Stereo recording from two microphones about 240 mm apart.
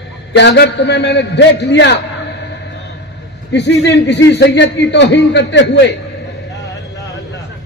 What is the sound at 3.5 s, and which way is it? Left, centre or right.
A man's voice, left.